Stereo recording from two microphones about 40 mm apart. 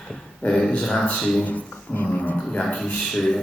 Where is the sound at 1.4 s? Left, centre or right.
Left.